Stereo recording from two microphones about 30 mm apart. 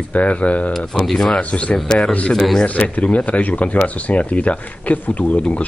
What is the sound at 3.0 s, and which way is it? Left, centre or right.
Speech, left.